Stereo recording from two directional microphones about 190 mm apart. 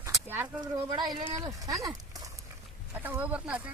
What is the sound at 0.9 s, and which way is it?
Speech, 25° right (ahead or behind).